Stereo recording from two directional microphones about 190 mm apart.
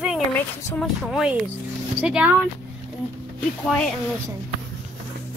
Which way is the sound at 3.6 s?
5° left (ahead or behind).